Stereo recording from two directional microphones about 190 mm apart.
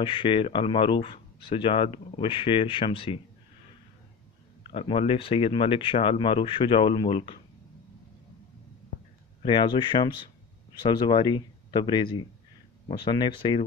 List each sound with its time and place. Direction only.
0.0 s speech: 25° left (ahead or behind)
4.7 s speech: 30° left (ahead or behind)
9.4 s speech: 25° left (ahead or behind)